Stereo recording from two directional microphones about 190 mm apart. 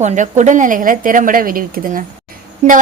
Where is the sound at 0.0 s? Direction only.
40° right (ahead or behind).